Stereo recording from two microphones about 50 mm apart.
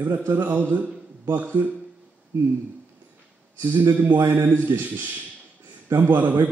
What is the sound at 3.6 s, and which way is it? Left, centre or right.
Speech, right.